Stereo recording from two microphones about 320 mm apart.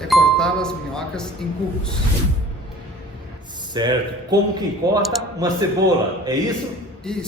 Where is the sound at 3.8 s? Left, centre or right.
Centre.